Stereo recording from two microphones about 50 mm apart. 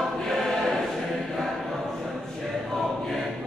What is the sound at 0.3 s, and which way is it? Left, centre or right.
Choir, centre.